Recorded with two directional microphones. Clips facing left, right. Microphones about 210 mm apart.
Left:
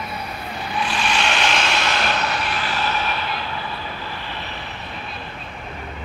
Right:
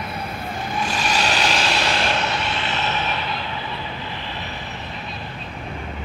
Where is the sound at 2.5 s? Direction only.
25° right (ahead or behind).